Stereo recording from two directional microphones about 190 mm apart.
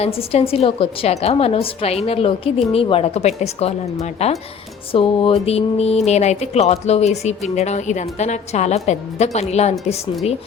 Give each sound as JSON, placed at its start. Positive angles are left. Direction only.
{"t": 0.0, "sound": "speech", "side_deg": 30}